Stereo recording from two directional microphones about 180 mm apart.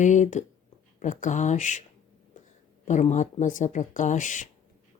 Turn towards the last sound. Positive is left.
turn(degrees=45)  # may be behind; listen again after turning